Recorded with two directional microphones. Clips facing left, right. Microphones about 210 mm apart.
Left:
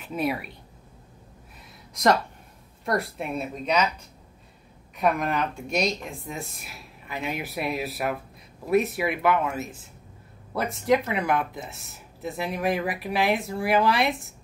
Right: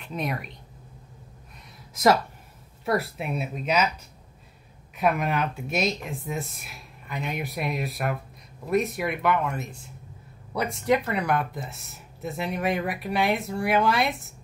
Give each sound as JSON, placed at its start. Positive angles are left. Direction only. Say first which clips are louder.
{"t": 0.0, "sound": "speech", "louder": "left 3 dB", "side_deg": 5}
{"t": 2.8, "sound": "speech", "louder": "right 1 dB", "side_deg": -5}
{"t": 4.9, "sound": "speech", "louder": "even", "side_deg": -5}